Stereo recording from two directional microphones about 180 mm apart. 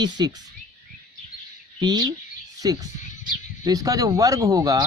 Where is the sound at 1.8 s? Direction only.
25° right (ahead or behind).